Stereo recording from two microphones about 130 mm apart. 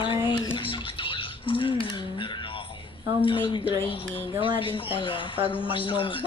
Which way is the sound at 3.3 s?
40° left (ahead or behind).